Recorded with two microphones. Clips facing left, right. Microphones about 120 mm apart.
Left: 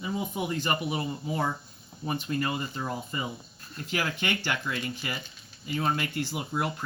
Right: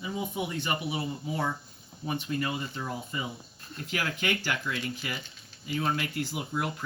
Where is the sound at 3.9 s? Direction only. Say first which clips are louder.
Left 1 dB; 30° left (ahead or behind).